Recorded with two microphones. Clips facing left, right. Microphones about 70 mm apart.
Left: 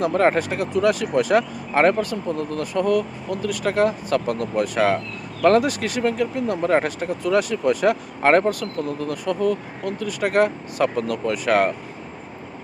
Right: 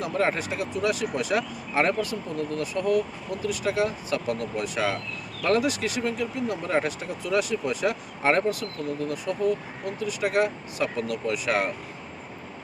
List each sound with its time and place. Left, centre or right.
0.0 s speech: left